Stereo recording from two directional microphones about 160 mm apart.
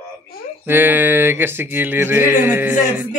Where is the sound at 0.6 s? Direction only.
10° right (ahead or behind).